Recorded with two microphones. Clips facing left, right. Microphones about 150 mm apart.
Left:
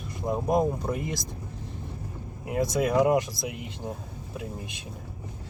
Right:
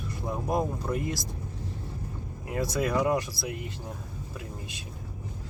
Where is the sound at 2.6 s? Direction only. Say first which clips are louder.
Left 4 dB; 20° left (ahead or behind).